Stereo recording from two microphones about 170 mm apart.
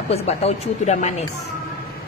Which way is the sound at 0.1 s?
40° left (ahead or behind).